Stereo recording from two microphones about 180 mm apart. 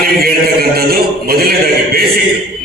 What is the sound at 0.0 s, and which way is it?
A man's voice, 55° right (ahead or behind).